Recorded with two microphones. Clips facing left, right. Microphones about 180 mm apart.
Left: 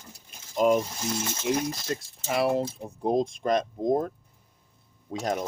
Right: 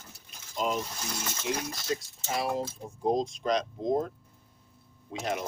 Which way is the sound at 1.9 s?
65° left (ahead or behind).